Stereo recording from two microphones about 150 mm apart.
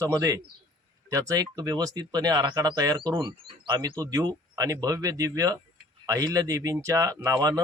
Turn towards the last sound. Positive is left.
turn(degrees=-25)  # may be behind; listen again after turning